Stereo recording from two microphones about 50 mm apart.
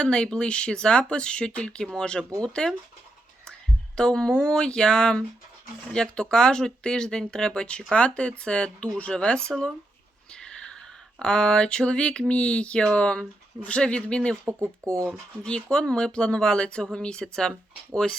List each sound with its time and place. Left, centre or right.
0.0 s speech: centre
3.9 s speech: centre
10.3 s a sound: centre
12.3 s speech: left
14.4 s speech: right
15.4 s speech: centre